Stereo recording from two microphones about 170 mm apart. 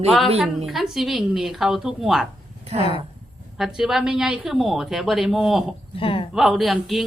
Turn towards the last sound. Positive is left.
turn(degrees=0)  # may be behind; listen again after turning